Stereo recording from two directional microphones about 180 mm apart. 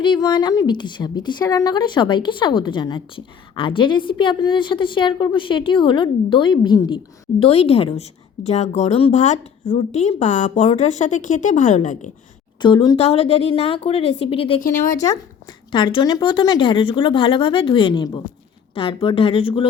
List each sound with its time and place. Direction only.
0.0 s a woman's voice: 25° left (ahead or behind); by 12.1 s 40° left (ahead or behind)
12.5 s a woman's voice: 25° left (ahead or behind)
14.6 s speech: 45° left (ahead or behind)
15.0 s a woman's voice: 20° left (ahead or behind)